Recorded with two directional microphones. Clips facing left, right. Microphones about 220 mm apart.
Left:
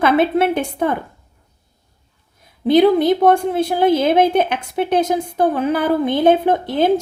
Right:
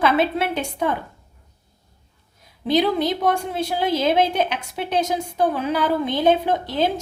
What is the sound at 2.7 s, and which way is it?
A woman's voice, 55° left (ahead or behind).